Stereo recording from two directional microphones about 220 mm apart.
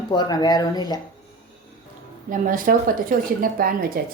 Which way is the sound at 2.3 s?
40° right (ahead or behind).